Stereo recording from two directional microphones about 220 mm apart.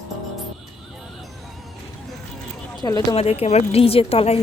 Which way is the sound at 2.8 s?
20° left (ahead or behind).